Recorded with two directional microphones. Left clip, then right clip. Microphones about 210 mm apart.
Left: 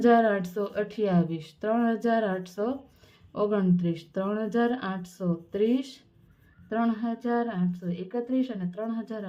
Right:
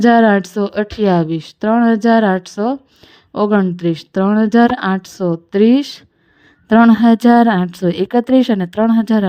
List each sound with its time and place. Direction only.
0.0 s a woman's voice: 40° right (ahead or behind)